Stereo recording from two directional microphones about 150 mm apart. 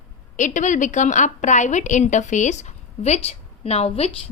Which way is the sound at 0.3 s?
55° left (ahead or behind).